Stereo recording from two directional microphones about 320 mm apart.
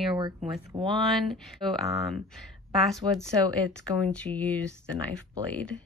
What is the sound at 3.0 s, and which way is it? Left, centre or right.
Speech, centre.